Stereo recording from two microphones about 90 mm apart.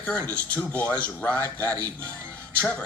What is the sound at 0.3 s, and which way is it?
A man's voice, 20° left (ahead or behind).